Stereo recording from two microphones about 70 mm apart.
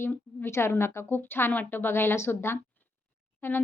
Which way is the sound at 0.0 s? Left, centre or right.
Left.